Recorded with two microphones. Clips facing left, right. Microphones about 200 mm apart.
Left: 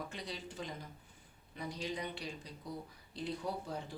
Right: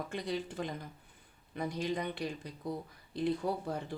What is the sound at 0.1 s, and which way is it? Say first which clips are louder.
Speech: right 8 dB; 55° right (ahead or behind).